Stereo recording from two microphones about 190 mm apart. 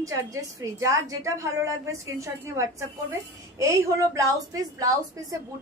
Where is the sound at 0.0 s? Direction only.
15° right (ahead or behind).